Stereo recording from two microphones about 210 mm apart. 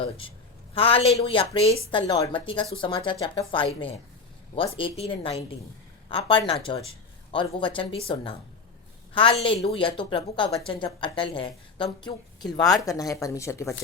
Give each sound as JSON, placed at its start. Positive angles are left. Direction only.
{"t": 0.2, "sound": "speech", "side_deg": 25}